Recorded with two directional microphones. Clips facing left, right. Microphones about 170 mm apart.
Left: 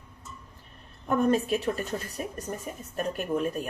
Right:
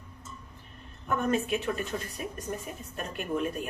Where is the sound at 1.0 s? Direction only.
35° left (ahead or behind).